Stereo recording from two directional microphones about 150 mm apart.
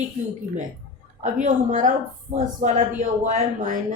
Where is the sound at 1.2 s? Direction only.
55° right (ahead or behind).